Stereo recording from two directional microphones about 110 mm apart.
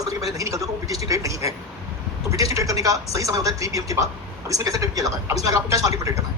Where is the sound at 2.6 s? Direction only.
30° right (ahead or behind).